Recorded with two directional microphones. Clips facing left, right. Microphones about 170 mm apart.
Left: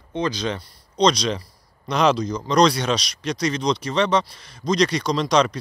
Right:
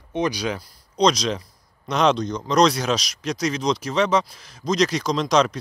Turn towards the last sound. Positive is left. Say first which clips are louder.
# even
turn(degrees=0)  # may be behind; listen again after turning